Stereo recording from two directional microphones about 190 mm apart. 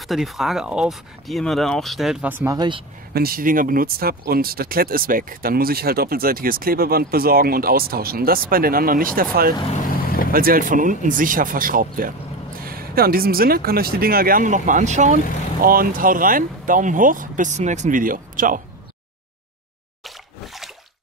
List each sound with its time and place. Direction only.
0.0 s speech: centre (ahead or behind); by 2.8 s 20° right (ahead or behind)
3.1 s speech: 50° right (ahead or behind)